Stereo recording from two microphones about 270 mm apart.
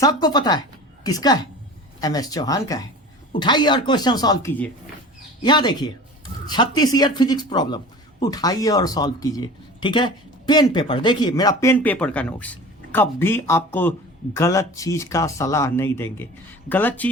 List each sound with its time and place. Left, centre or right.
0.0 s speech: centre